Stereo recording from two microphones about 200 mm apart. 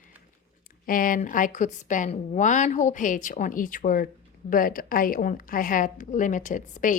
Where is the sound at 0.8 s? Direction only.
45° left (ahead or behind).